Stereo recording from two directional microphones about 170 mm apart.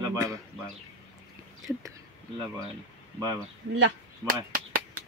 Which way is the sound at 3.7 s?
75° right (ahead or behind).